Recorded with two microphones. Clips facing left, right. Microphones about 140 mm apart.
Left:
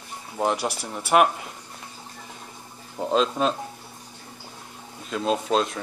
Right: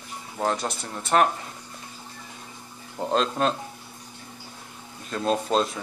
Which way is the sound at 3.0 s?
Centre (ahead or behind).